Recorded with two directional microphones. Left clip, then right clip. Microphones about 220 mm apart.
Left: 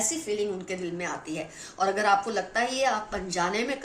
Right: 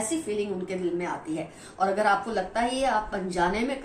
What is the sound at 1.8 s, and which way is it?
Speech, 40° left (ahead or behind).